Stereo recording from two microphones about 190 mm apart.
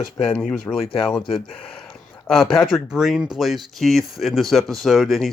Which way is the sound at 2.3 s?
Centre (ahead or behind).